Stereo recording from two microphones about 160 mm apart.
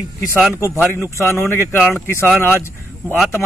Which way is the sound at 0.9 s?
15° left (ahead or behind).